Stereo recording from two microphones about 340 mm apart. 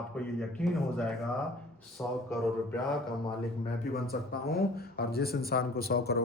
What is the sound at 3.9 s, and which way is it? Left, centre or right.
A man's voice, left.